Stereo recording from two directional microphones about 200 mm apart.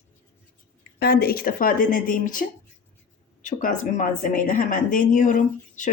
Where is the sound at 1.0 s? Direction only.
50° left (ahead or behind).